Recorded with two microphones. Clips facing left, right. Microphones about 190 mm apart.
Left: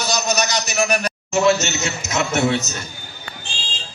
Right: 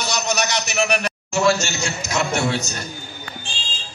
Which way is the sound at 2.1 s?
20° left (ahead or behind).